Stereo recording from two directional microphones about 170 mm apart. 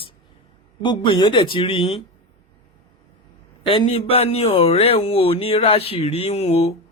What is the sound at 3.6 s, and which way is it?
Speech, 30° left (ahead or behind).